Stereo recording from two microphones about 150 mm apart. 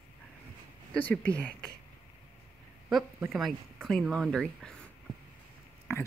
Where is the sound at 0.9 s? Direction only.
10° left (ahead or behind).